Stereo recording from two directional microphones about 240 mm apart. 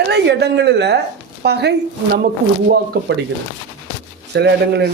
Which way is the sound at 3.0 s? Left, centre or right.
Right.